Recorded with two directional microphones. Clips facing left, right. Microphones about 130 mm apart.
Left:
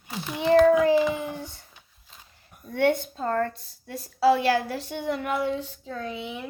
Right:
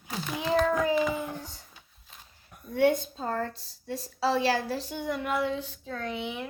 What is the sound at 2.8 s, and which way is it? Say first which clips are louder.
A woman's voice: left 1 dB; 60° left (ahead or behind).